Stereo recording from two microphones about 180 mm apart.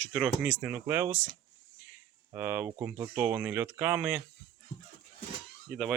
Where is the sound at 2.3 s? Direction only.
10° right (ahead or behind).